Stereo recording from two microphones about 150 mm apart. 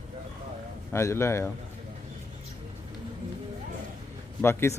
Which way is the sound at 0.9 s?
15° left (ahead or behind).